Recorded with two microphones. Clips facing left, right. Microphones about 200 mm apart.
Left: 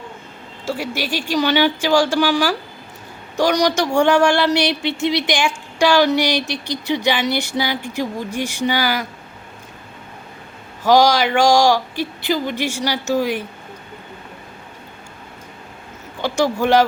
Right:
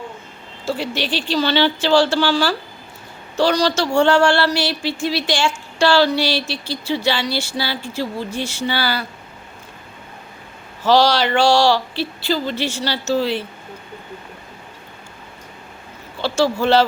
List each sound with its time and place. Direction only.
0.6 s speech: 10° left (ahead or behind)
10.8 s speech: 10° left (ahead or behind)
16.2 s speech: 15° left (ahead or behind)